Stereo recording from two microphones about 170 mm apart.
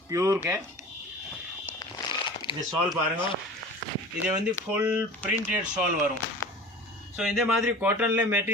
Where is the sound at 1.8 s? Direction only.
30° left (ahead or behind).